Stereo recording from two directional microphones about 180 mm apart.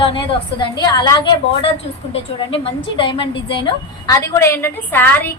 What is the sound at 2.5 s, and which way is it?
A woman's voice, 30° left (ahead or behind).